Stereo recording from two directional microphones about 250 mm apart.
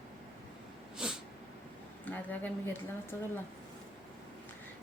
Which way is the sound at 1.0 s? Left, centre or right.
Centre.